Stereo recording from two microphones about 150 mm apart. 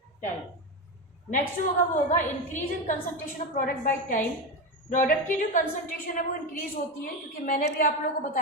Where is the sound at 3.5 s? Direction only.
70° left (ahead or behind).